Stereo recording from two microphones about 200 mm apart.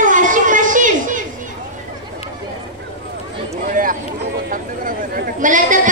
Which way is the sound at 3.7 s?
45° right (ahead or behind).